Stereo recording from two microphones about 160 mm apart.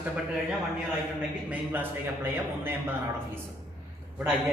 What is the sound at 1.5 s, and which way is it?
A man's voice, 10° right (ahead or behind).